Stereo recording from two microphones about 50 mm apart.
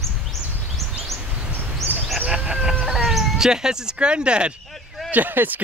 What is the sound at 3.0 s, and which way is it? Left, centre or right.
Speech, centre.